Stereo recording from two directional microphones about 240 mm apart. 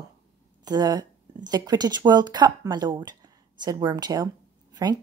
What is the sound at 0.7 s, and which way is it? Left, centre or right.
A woman's voice, centre.